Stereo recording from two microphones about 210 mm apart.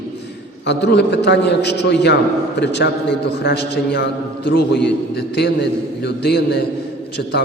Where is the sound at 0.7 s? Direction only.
55° left (ahead or behind).